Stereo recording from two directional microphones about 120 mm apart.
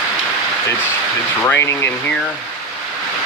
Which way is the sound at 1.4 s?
20° left (ahead or behind).